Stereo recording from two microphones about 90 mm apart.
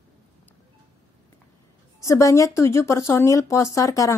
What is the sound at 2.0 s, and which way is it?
Speech, 35° left (ahead or behind).